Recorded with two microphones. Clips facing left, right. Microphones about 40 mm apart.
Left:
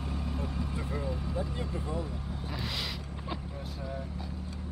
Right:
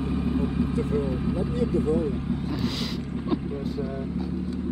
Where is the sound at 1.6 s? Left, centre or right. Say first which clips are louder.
Right 12 dB; right.